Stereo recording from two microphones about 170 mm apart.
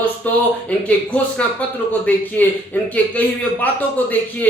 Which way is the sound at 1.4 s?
10° left (ahead or behind).